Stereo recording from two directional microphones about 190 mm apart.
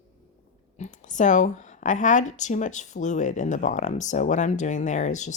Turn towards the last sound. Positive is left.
turn(degrees=40)  # may be behind; listen again after turning